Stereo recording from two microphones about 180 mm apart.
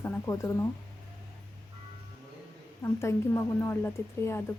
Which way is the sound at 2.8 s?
15° left (ahead or behind).